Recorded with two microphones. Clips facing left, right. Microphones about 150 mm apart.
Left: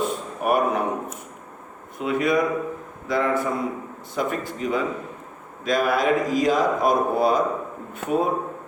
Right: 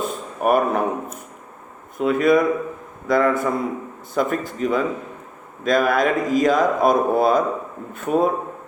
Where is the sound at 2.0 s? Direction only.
45° right (ahead or behind).